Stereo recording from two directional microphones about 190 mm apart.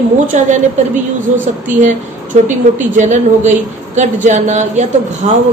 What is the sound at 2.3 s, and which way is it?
A woman's voice, 40° right (ahead or behind).